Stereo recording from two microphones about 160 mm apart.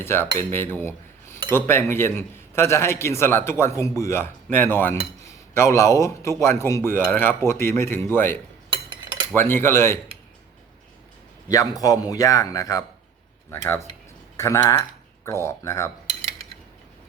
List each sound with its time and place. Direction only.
0.0 s a man's voice: 15° left (ahead or behind)
0.3 s cutlery: 15° left (ahead or behind)
1.5 s a man's voice: 15° left (ahead or behind)
11.4 s a man's voice: 25° left (ahead or behind)